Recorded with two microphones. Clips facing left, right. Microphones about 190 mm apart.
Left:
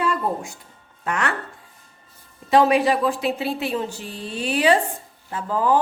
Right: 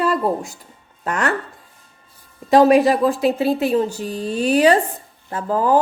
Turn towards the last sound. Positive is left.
turn(degrees=-45)  # may be behind; listen again after turning